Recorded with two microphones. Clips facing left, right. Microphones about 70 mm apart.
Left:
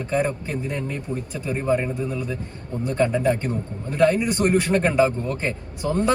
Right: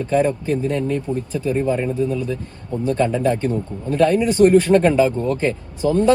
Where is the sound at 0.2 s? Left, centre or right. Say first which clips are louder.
Right 6 dB; centre.